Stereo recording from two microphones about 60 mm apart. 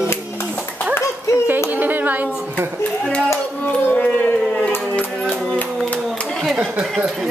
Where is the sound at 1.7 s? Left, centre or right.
Right.